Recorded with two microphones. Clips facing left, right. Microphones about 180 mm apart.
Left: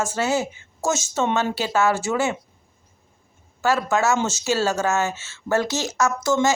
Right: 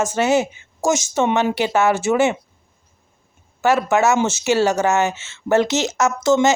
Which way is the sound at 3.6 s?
20° right (ahead or behind).